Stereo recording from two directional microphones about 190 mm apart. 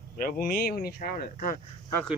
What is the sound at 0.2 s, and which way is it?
Speech, 50° left (ahead or behind).